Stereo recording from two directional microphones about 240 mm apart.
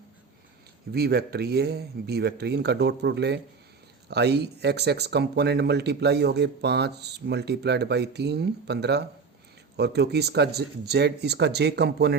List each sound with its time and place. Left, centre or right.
0.9 s speech: right